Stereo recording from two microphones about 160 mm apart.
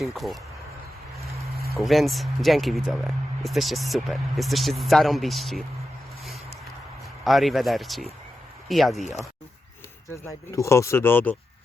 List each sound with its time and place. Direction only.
0.0 s speech: centre (ahead or behind)
1.8 s speech: centre (ahead or behind)
7.3 s speech: centre (ahead or behind)
10.1 s speech: 20° left (ahead or behind)